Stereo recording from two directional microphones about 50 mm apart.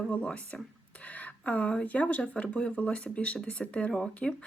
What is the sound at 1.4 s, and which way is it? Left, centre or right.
Speech, left.